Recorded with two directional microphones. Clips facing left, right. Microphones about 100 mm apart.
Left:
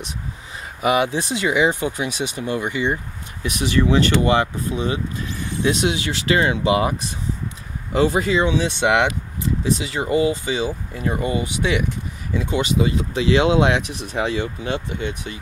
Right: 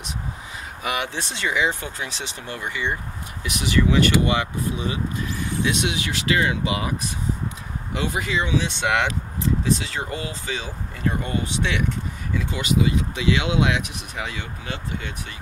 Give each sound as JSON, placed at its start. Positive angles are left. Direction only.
{"t": 0.8, "sound": "speech", "side_deg": 20}
{"t": 3.6, "sound": "speech", "side_deg": 35}
{"t": 7.9, "sound": "speech", "side_deg": 35}
{"t": 9.8, "sound": "speech", "side_deg": 15}
{"t": 12.4, "sound": "speech", "side_deg": 30}